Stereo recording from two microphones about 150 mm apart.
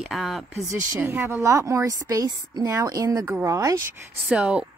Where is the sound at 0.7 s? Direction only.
15° right (ahead or behind).